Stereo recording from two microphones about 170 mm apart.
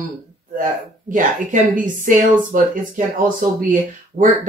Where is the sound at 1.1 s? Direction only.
50° right (ahead or behind).